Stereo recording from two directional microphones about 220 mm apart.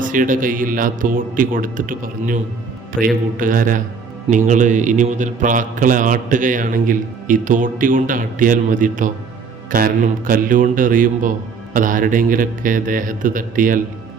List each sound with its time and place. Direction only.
0.0 s a man's voice: 35° right (ahead or behind)